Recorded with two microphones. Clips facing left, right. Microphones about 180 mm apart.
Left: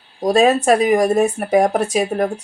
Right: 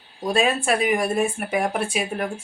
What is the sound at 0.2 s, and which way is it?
Speech, 40° left (ahead or behind).